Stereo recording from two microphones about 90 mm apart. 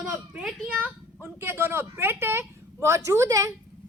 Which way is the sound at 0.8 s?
25° right (ahead or behind).